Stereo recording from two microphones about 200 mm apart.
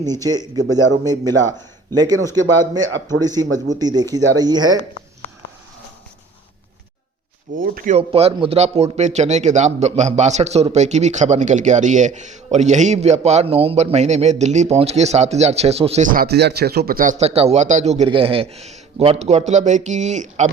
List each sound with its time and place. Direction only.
0.0 s speech: 20° right (ahead or behind)
7.6 s speech: 45° right (ahead or behind)
7.9 s a man's voice: 30° right (ahead or behind)